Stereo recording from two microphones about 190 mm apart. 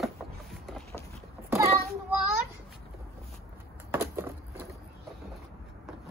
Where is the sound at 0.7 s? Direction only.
5° left (ahead or behind).